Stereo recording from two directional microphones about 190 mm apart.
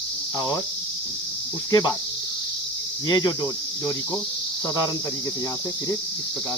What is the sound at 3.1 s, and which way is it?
Speech, 20° left (ahead or behind).